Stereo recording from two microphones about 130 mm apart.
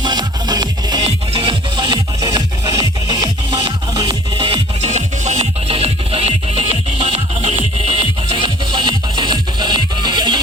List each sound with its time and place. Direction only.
0.0 s music: 30° right (ahead or behind)
1.0 s music: 45° right (ahead or behind)
4.9 s music: 65° right (ahead or behind); by 10.4 s 35° right (ahead or behind)